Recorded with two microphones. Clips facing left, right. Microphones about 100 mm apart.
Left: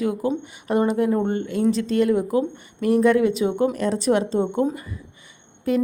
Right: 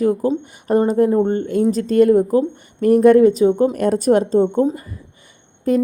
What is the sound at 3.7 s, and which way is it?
Speech, 50° right (ahead or behind).